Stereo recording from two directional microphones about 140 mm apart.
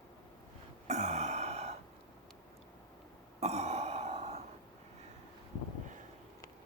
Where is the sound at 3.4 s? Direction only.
50° right (ahead or behind).